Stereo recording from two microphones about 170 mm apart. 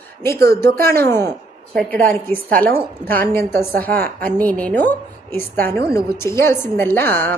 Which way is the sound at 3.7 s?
60° right (ahead or behind).